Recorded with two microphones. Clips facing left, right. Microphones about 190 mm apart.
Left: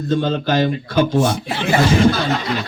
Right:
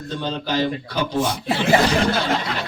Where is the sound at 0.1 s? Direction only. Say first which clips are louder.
Left 7 dB; 50° left (ahead or behind).